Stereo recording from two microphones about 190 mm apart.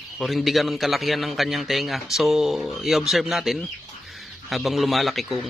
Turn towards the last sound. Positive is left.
turn(degrees=0)  # may be behind; listen again after turning